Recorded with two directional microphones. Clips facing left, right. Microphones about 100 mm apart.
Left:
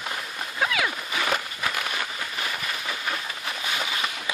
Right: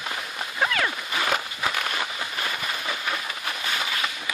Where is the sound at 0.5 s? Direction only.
Centre (ahead or behind).